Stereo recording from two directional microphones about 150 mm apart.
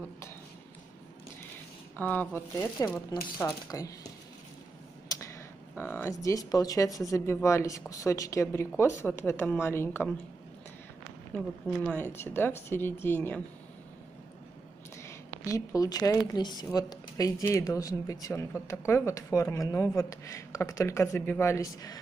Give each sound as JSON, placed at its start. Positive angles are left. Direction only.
{"t": 2.0, "sound": "a woman's voice", "side_deg": 10}
{"t": 5.8, "sound": "a woman's voice", "side_deg": 15}
{"t": 11.3, "sound": "speech", "side_deg": 10}
{"t": 15.0, "sound": "a woman's voice", "side_deg": 20}